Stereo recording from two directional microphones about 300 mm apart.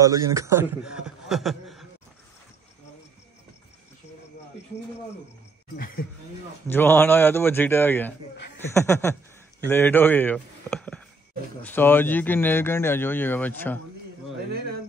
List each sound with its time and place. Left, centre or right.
0.3 s a man's voice: centre
5.8 s speech: left
6.7 s speech: centre